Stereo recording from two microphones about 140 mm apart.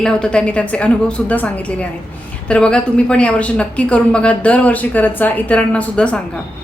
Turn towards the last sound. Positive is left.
turn(degrees=10)  # may be behind; listen again after turning